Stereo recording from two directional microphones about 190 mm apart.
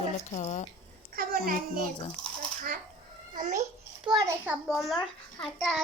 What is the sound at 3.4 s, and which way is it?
Speech, 40° right (ahead or behind).